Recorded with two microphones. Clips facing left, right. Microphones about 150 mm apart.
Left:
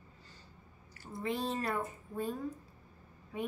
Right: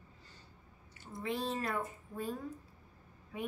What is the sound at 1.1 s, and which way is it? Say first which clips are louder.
Speech: left 1 dB; centre (ahead or behind).